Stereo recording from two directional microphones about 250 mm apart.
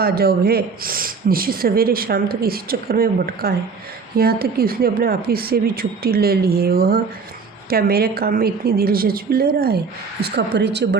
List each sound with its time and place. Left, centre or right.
0.0 s speech: right